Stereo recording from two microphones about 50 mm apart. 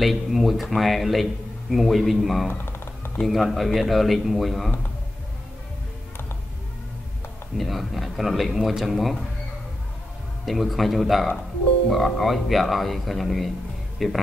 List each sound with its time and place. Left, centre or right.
0.0 s speech: centre
2.5 s a sound: left
3.3 s speech: centre
7.5 s speech: centre
10.4 s speech: centre